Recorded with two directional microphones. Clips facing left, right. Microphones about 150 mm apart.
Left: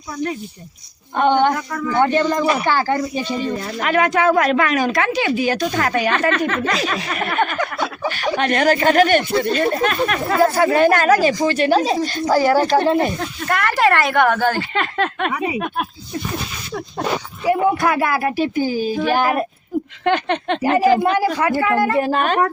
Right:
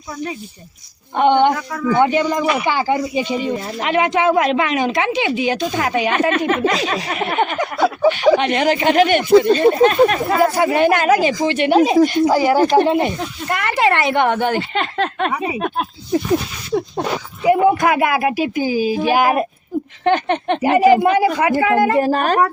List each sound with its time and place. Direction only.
1.1 s a woman's voice: 20° right (ahead or behind)
3.6 s speech: 25° right (ahead or behind)
7.1 s a sound: 20° right (ahead or behind)
8.1 s speech: 20° right (ahead or behind)
16.7 s a woman's voice: 25° right (ahead or behind)
21.9 s a woman's voice: 40° right (ahead or behind)